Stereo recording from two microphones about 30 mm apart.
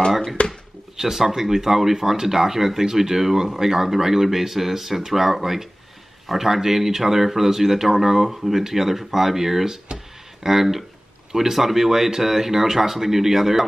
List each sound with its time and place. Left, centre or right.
0.4 s speech: left
0.9 s speech: centre